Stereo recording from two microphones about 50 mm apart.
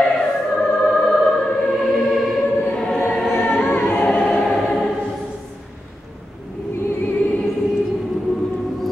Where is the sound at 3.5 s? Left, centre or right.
Left.